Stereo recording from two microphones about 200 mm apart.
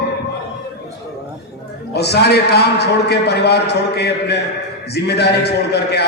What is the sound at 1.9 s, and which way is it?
A man's voice, 55° left (ahead or behind).